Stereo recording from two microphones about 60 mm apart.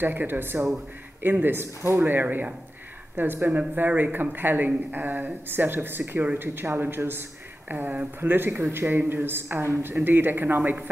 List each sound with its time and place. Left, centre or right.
0.0 s a woman's voice: right
2.0 s a woman's voice: right